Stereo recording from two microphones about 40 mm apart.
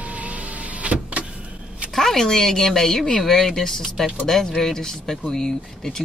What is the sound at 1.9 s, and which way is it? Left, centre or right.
Speech, centre.